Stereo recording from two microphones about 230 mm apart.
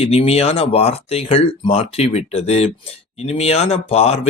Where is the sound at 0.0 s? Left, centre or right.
Left.